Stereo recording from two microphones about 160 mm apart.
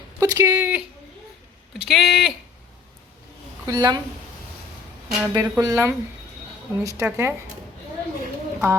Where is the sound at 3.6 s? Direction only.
25° right (ahead or behind).